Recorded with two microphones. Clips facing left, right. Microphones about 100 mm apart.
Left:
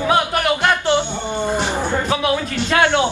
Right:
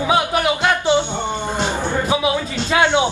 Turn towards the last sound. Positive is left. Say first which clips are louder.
# even
turn(degrees=-15)  # may be behind; listen again after turning